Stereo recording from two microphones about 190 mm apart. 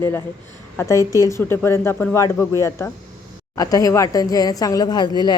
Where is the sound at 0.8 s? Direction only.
15° left (ahead or behind).